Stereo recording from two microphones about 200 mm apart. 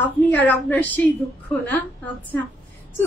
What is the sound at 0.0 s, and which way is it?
Speech, 10° left (ahead or behind).